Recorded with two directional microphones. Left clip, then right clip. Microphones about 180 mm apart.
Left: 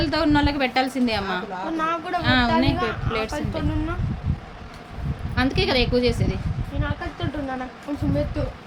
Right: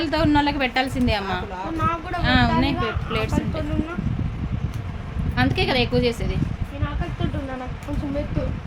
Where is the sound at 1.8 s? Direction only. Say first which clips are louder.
Even; 30° left (ahead or behind).